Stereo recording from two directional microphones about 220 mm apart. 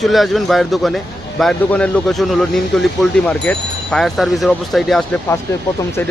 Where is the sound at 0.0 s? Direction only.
Centre (ahead or behind).